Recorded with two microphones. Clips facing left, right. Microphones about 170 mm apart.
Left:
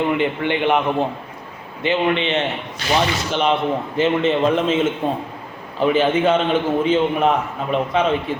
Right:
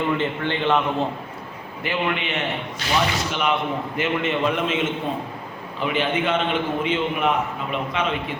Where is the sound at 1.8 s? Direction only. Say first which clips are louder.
Left 6 dB; 25° left (ahead or behind).